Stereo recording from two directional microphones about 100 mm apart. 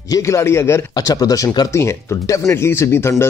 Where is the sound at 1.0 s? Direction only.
35° left (ahead or behind).